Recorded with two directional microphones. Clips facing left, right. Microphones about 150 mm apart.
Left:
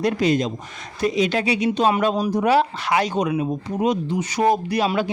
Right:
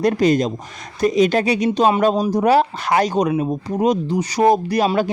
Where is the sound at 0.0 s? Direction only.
45° right (ahead or behind).